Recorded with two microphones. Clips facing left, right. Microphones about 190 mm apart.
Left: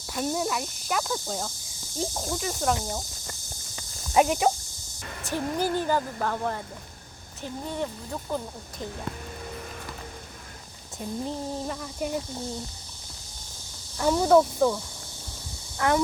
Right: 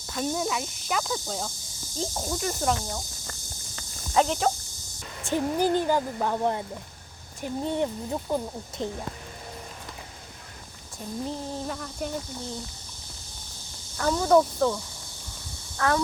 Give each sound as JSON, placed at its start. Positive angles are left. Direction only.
{"t": 0.1, "sound": "speech", "side_deg": 5}
{"t": 2.7, "sound": "speech", "side_deg": 15}
{"t": 3.8, "sound": "cricket", "side_deg": 10}
{"t": 5.2, "sound": "speech", "side_deg": -20}
{"t": 11.3, "sound": "speech", "side_deg": 0}
{"t": 14.0, "sound": "speech", "side_deg": 10}
{"t": 15.8, "sound": "speech", "side_deg": 15}